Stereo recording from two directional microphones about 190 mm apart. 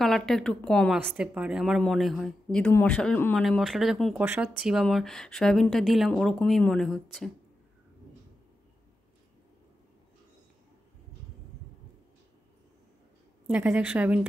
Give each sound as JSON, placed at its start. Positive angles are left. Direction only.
{"t": 0.0, "sound": "a woman's voice", "side_deg": 0}
{"t": 0.9, "sound": "a woman's voice", "side_deg": -10}
{"t": 13.5, "sound": "a woman's voice", "side_deg": -10}